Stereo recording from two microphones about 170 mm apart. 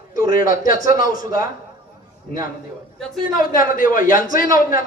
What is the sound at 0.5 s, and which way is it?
Speech, 55° left (ahead or behind).